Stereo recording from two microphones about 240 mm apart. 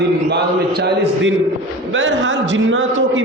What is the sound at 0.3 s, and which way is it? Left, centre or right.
A man's voice, right.